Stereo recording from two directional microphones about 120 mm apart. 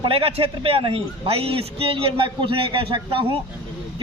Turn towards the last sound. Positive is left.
turn(degrees=-45)  # may be behind; listen again after turning